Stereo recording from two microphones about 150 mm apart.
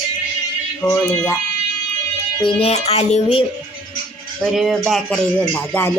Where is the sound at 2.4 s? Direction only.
45° left (ahead or behind).